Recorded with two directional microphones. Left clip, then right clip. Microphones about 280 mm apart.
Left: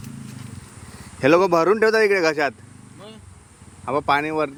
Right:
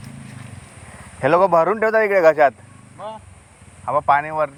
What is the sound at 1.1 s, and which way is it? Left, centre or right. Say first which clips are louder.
A man's voice: right 2 dB; centre.